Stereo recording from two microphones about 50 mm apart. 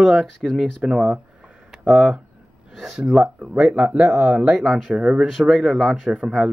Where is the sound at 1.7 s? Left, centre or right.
Centre.